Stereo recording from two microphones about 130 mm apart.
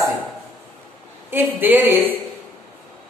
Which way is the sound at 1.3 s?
15° right (ahead or behind).